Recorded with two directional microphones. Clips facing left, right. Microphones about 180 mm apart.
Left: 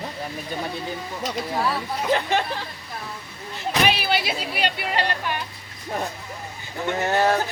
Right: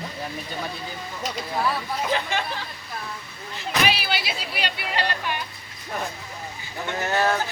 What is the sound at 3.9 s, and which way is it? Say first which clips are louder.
Speech: left 3 dB; 55° left (ahead or behind).